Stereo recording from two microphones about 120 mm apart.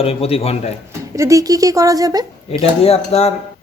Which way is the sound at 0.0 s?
55° left (ahead or behind).